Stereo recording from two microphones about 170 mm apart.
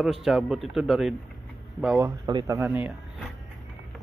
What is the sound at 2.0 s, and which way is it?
Speech, 20° right (ahead or behind).